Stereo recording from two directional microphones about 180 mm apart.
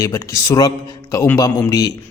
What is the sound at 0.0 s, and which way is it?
Speech, 15° left (ahead or behind).